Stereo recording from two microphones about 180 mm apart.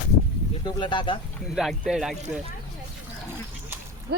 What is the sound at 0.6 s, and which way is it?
Speech, 25° left (ahead or behind).